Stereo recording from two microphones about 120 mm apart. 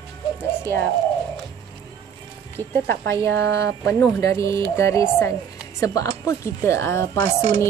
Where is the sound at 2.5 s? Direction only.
20° left (ahead or behind).